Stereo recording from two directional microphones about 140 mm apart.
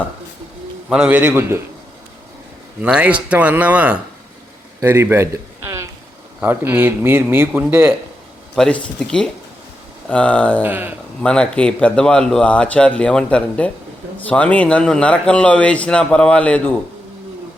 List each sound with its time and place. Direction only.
0.9 s speech: 5° right (ahead or behind)
2.8 s speech: 10° right (ahead or behind)
4.8 s a sound: 15° right (ahead or behind)
6.4 s speech: 15° right (ahead or behind)
8.5 s speech: 5° left (ahead or behind)
10.6 s speech: 10° right (ahead or behind)
11.2 s speech: 5° left (ahead or behind)